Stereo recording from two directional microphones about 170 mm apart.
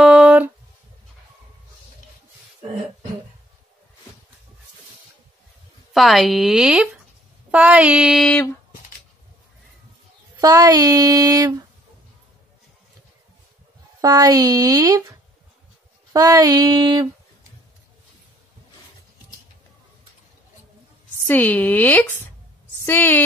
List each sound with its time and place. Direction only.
0.0 s a sound: 5° right (ahead or behind)
5.9 s speech: centre (ahead or behind)
10.4 s child singing: 20° right (ahead or behind)
14.0 s child singing: 20° right (ahead or behind)
16.1 s child singing: 20° right (ahead or behind)
21.3 s speech: 10° left (ahead or behind)